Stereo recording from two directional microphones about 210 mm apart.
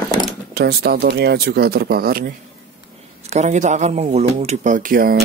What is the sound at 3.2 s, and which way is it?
Speech, 35° right (ahead or behind).